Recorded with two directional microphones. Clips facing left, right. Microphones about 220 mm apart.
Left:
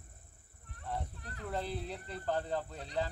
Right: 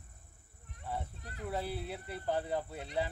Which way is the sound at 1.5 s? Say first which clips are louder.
Even; 5° right (ahead or behind).